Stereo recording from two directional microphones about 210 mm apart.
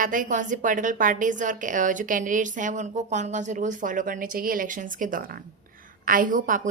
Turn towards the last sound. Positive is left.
turn(degrees=-40)  # may be behind; listen again after turning